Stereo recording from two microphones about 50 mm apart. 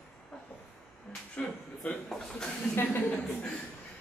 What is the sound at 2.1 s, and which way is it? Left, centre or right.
Speech, centre.